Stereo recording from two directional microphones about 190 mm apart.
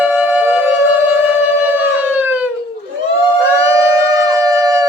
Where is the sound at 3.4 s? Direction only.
15° right (ahead or behind).